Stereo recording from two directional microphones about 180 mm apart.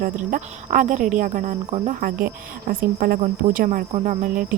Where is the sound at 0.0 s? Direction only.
50° right (ahead or behind).